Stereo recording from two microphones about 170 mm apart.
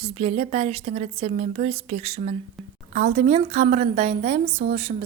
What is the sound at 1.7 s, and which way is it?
A woman's voice, 35° right (ahead or behind).